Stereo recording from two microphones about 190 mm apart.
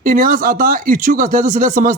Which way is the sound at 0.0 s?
45° right (ahead or behind).